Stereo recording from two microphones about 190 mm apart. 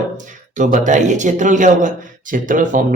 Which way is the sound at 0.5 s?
40° right (ahead or behind).